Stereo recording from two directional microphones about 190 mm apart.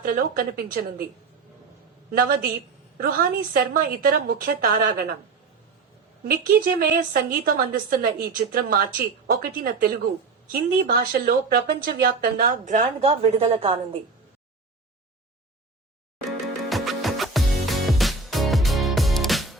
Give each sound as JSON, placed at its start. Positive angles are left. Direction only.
{"t": 0.1, "sound": "speech", "side_deg": -50}
{"t": 2.0, "sound": "speech", "side_deg": -50}
{"t": 6.7, "sound": "speech", "side_deg": -50}
{"t": 16.6, "sound": "music", "side_deg": 0}